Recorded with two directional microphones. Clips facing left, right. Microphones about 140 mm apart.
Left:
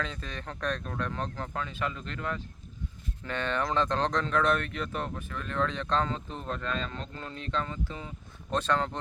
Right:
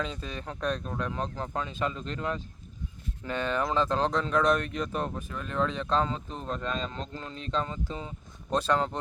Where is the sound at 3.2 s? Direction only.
10° right (ahead or behind).